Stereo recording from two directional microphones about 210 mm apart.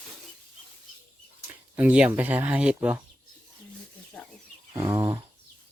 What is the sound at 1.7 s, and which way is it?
Speech, 5° right (ahead or behind).